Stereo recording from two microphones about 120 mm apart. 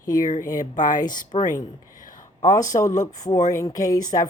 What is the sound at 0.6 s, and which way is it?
Speech, 90° left.